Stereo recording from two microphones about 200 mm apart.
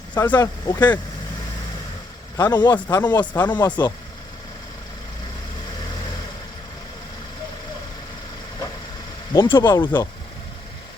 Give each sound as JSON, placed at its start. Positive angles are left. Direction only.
{"t": 0.1, "sound": "speech", "side_deg": 20}
{"t": 2.3, "sound": "a man's voice", "side_deg": 15}
{"t": 9.3, "sound": "speech", "side_deg": 15}
{"t": 9.8, "sound": "a man's voice", "side_deg": 10}